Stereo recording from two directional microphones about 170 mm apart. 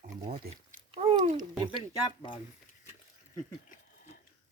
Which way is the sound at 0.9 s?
35° right (ahead or behind).